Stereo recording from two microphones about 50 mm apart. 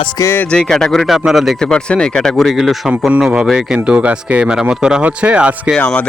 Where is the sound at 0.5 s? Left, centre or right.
Centre.